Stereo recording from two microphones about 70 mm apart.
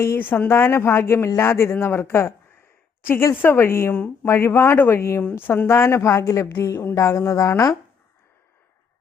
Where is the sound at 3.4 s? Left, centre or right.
Left.